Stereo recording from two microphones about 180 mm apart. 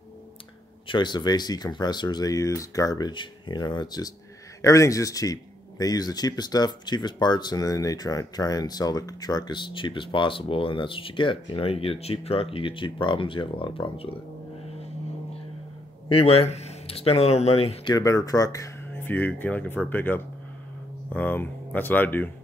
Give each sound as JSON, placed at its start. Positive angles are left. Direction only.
{"t": 0.8, "sound": "speech", "side_deg": 25}
{"t": 16.1, "sound": "speech", "side_deg": 30}
{"t": 17.9, "sound": "speech", "side_deg": 20}